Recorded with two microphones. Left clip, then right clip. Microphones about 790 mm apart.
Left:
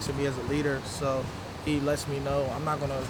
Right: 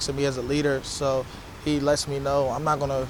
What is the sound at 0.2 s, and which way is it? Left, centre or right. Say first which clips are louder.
Speech: right 4 dB; right.